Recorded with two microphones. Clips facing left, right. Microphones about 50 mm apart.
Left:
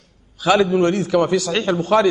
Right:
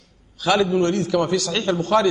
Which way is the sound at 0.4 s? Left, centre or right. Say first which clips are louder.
Left 3 dB; centre.